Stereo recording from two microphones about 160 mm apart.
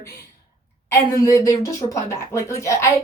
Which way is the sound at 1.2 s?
20° left (ahead or behind).